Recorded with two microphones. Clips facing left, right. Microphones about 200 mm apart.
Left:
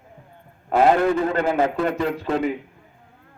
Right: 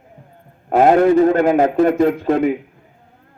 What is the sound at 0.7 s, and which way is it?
A man's voice, 45° right (ahead or behind).